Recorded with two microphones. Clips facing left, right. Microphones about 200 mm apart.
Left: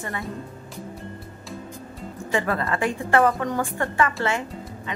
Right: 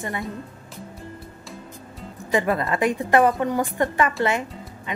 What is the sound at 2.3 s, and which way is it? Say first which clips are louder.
A woman's voice: right 3 dB; 20° right (ahead or behind).